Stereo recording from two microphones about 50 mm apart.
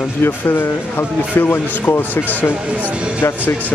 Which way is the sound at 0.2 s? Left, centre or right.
Left.